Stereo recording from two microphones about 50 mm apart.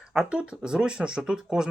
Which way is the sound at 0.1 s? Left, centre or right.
Centre.